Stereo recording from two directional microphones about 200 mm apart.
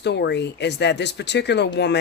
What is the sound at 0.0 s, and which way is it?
Speech, 60° left (ahead or behind).